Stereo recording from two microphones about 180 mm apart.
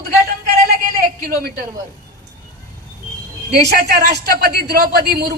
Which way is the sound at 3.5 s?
60° right (ahead or behind).